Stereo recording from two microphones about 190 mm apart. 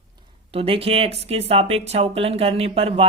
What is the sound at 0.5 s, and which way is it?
Speech, 30° right (ahead or behind).